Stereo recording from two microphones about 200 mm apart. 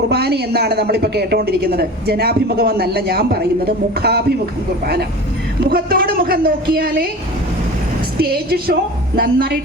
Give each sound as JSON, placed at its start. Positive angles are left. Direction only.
{"t": 0.1, "sound": "speech", "side_deg": -55}
{"t": 5.6, "sound": "speech", "side_deg": -50}
{"t": 8.2, "sound": "speech", "side_deg": -50}